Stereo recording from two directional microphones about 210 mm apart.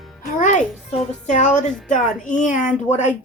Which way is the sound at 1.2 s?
35° left (ahead or behind).